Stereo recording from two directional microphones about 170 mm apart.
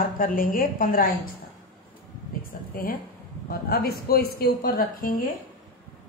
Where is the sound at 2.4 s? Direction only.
55° left (ahead or behind).